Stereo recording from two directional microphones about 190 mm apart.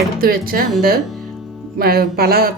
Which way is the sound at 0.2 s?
50° right (ahead or behind).